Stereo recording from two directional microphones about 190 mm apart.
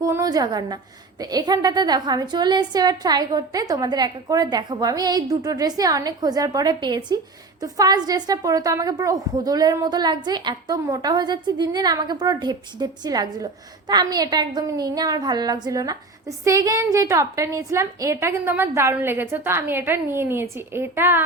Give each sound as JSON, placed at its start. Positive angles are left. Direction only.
{"t": 0.0, "sound": "a woman's voice", "side_deg": -20}